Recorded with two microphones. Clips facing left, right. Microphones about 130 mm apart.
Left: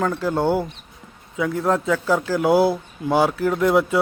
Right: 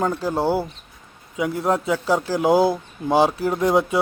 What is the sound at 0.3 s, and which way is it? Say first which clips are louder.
A man's voice: left 1 dB; 10° right (ahead or behind).